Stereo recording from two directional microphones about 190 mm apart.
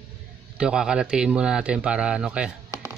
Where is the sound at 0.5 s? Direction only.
5° right (ahead or behind).